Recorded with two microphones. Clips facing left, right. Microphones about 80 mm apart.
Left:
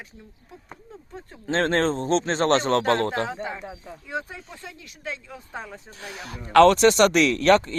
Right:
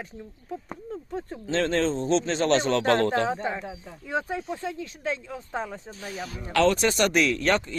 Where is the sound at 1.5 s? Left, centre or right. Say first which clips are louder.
Left 2 dB; left.